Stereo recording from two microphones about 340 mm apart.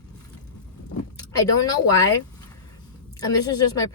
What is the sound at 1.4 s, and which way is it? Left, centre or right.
Speech, centre.